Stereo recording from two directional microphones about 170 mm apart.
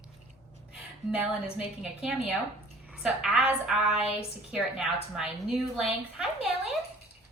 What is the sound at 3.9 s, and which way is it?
Speech, 35° left (ahead or behind).